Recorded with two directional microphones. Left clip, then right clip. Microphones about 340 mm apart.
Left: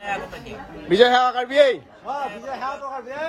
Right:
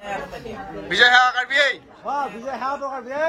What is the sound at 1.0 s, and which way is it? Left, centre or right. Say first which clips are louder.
Speech: right 2 dB; centre.